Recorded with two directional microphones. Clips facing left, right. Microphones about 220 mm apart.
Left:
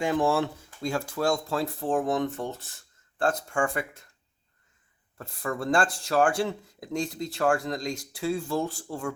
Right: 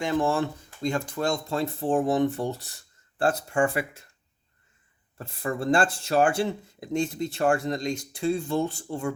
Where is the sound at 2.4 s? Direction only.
35° right (ahead or behind).